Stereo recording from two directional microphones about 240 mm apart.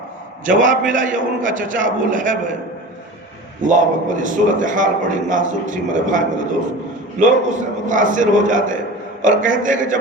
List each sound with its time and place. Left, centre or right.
0.4 s a man's voice: right
3.6 s a man's voice: right